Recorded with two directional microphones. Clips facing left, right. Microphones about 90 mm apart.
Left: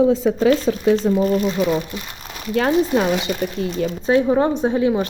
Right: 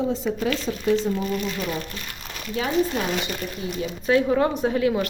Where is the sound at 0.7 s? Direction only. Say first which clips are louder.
Left 6 dB; 90° left.